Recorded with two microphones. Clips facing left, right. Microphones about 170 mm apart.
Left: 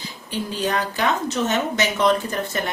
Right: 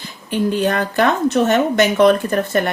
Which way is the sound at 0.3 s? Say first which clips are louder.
Right 7 dB; 55° right (ahead or behind).